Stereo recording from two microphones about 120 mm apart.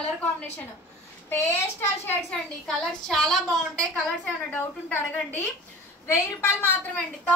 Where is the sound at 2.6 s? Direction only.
5° left (ahead or behind).